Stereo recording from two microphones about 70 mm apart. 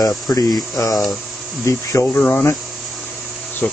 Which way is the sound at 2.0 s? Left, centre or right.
Left.